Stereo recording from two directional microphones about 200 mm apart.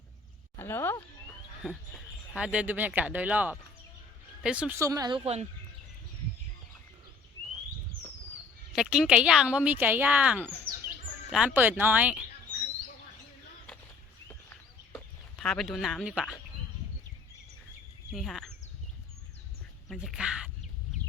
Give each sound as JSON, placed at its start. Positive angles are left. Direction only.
{"t": 0.5, "sound": "speech", "side_deg": 10}
{"t": 1.6, "sound": "speech", "side_deg": 0}
{"t": 8.7, "sound": "speech", "side_deg": -5}
{"t": 14.9, "sound": "speech", "side_deg": 0}
{"t": 18.1, "sound": "speech", "side_deg": 0}
{"t": 19.9, "sound": "speech", "side_deg": 0}